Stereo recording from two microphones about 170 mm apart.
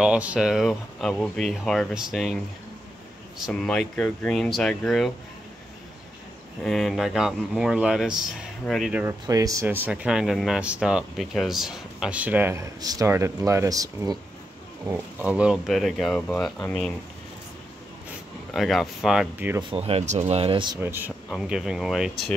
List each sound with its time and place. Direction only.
0.0 s speech: 5° right (ahead or behind)
3.4 s speech: 5° left (ahead or behind)
6.6 s speech: centre (ahead or behind)
9.0 s speech: 20° right (ahead or behind)
14.9 s speech: 10° right (ahead or behind)
18.5 s speech: centre (ahead or behind)
19.7 s speech: 35° right (ahead or behind)
20.8 s speech: 15° right (ahead or behind)